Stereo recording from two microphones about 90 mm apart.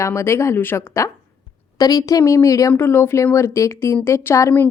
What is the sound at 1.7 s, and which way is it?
Speech, 40° left (ahead or behind).